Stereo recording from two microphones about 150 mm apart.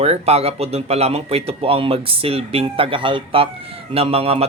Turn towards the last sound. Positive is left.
turn(degrees=-40)  # may be behind; listen again after turning